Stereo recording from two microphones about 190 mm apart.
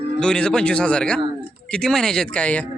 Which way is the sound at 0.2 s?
5° left (ahead or behind).